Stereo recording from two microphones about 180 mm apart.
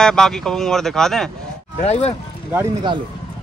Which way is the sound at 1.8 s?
35° left (ahead or behind).